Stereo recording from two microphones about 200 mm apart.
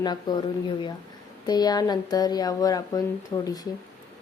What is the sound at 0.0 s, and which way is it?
Speech, 20° left (ahead or behind).